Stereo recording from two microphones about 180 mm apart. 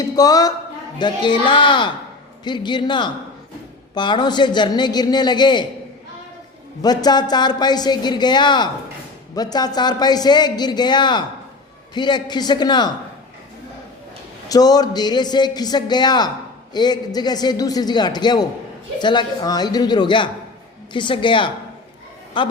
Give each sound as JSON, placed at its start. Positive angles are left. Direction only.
{"t": 0.2, "sound": "a man's voice", "side_deg": 20}
{"t": 6.8, "sound": "a man's voice", "side_deg": 20}
{"t": 14.5, "sound": "a man's voice", "side_deg": 20}